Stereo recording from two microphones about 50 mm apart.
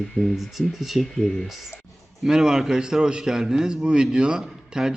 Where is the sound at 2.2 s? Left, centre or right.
Centre.